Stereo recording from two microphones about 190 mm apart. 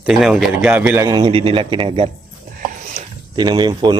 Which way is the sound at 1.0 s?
25° right (ahead or behind).